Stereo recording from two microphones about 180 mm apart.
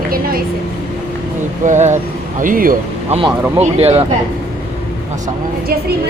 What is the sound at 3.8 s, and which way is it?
Speech, 35° right (ahead or behind).